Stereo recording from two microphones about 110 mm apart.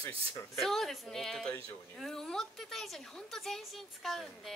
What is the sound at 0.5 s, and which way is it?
A woman's voice, centre (ahead or behind).